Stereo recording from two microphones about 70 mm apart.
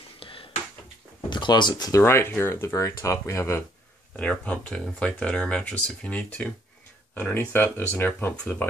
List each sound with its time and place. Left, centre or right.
1.3 s speech: left
1.9 s speech: left
4.2 s speech: centre
7.3 s speech: left